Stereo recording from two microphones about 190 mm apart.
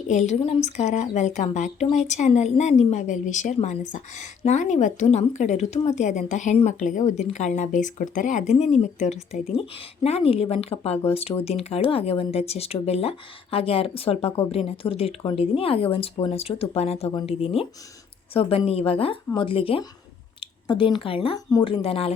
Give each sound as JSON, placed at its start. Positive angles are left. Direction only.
{"t": 0.1, "sound": "speech", "side_deg": 40}